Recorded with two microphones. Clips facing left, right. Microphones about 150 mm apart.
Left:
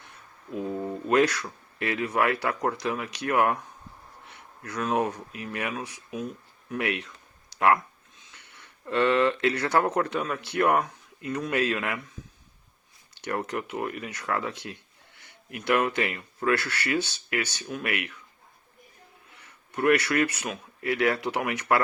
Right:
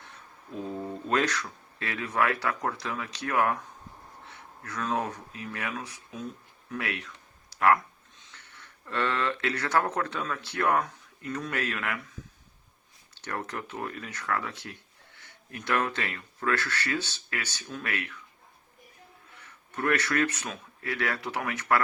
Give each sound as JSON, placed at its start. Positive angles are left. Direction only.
{"t": 0.5, "sound": "speech", "side_deg": 10}
{"t": 8.3, "sound": "speech", "side_deg": 15}
{"t": 13.1, "sound": "speech", "side_deg": 15}
{"t": 19.7, "sound": "speech", "side_deg": 15}